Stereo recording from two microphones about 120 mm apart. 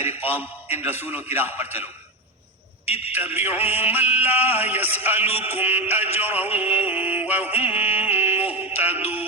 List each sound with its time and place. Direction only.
0.7 s music: 15° right (ahead or behind)
2.8 s speech: 60° left (ahead or behind)
3.1 s music: 15° right (ahead or behind)